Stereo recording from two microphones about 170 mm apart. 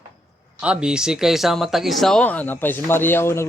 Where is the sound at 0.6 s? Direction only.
5° right (ahead or behind).